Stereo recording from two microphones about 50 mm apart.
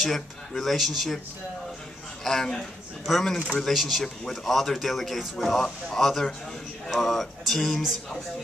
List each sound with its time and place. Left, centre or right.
0.0 s speech: centre
2.2 s speech: centre